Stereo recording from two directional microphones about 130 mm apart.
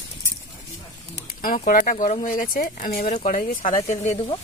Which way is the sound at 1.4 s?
90° left.